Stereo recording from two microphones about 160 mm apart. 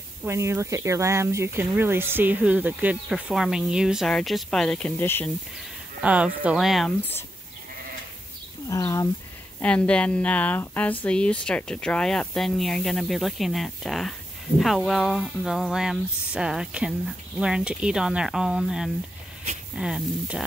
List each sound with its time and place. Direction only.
0.2 s speech: 15° right (ahead or behind); by 5.3 s 15° left (ahead or behind)
6.0 s speech: 10° right (ahead or behind)
8.6 s speech: 20° left (ahead or behind)
9.6 s a woman's voice: 10° left (ahead or behind)